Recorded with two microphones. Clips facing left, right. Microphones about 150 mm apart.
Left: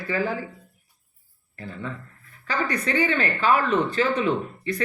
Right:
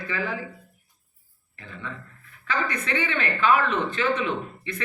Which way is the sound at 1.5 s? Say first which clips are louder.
Left 4 dB; 35° left (ahead or behind).